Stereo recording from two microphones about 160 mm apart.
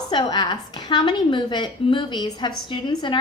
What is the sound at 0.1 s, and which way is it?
A woman's voice, 25° left (ahead or behind).